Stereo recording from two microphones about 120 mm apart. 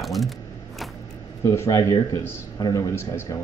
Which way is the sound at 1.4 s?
25° left (ahead or behind).